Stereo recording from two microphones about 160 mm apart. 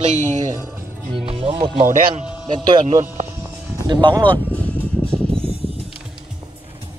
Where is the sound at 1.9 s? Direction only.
50° right (ahead or behind).